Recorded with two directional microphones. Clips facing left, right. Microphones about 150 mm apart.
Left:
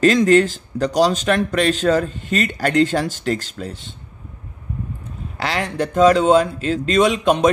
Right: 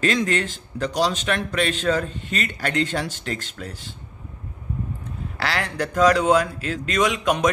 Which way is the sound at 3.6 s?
25° left (ahead or behind).